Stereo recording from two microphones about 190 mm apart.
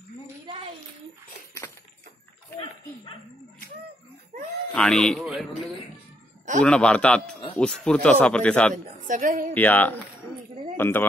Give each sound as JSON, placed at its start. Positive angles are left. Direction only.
{"t": 4.7, "sound": "speech", "side_deg": 5}
{"t": 9.0, "sound": "a woman's voice", "side_deg": -45}
{"t": 9.5, "sound": "speech", "side_deg": 10}